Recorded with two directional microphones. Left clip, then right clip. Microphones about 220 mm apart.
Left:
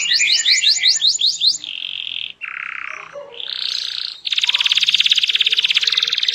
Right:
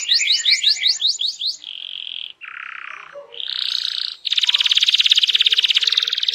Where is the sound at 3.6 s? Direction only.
15° right (ahead or behind).